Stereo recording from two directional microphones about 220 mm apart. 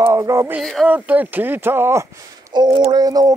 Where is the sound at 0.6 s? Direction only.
Centre (ahead or behind).